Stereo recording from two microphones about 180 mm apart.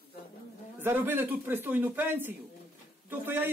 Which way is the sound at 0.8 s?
10° right (ahead or behind).